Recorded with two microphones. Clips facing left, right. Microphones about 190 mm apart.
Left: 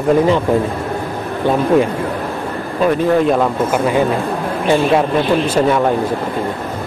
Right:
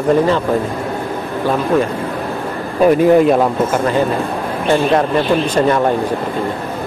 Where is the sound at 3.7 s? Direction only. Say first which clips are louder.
Even; 10° left (ahead or behind).